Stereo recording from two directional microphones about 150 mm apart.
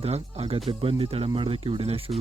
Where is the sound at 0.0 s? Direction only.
45° right (ahead or behind).